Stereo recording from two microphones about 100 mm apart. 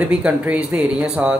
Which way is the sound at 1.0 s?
5° right (ahead or behind).